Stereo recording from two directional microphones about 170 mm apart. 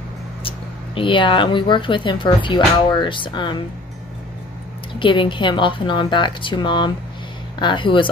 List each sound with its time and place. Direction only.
0.4 s speech: 30° left (ahead or behind)
4.9 s speech: 30° left (ahead or behind)